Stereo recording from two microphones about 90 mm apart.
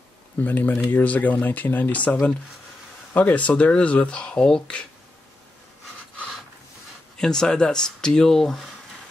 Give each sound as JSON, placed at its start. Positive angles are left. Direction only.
{"t": 0.4, "sound": "speech", "side_deg": 20}
{"t": 7.2, "sound": "speech", "side_deg": 10}